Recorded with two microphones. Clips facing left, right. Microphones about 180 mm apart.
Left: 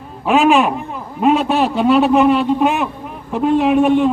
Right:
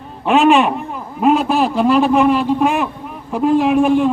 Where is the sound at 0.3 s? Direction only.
Centre (ahead or behind).